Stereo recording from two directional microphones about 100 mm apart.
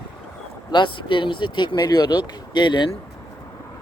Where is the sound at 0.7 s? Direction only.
55° left (ahead or behind).